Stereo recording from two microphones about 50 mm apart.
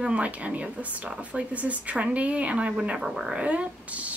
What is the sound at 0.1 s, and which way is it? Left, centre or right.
Speech, right.